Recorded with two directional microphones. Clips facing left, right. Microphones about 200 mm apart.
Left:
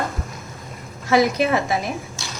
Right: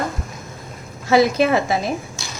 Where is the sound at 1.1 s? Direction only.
30° right (ahead or behind).